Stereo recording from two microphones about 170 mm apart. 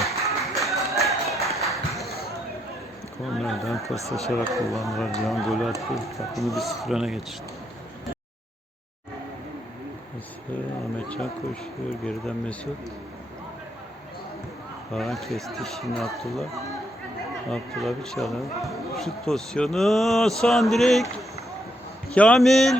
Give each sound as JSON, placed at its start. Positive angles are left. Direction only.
{"t": 0.5, "sound": "a sound", "side_deg": 0}
{"t": 1.6, "sound": "music", "side_deg": 0}
{"t": 3.3, "sound": "a sound", "side_deg": 0}
{"t": 3.8, "sound": "speech", "side_deg": -20}
{"t": 4.3, "sound": "speech", "side_deg": 0}
{"t": 11.9, "sound": "speech", "side_deg": 5}
{"t": 14.9, "sound": "speech", "side_deg": 0}
{"t": 17.5, "sound": "speech", "side_deg": 0}